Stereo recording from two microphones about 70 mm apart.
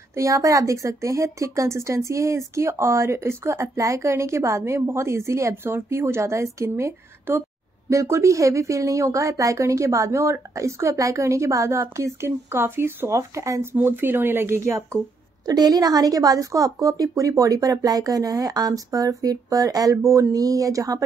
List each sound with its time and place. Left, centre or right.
0.1 s speech: right
7.3 s speech: right
7.9 s speech: right
13.1 s speech: right
13.7 s speech: right
15.4 s a woman's voice: right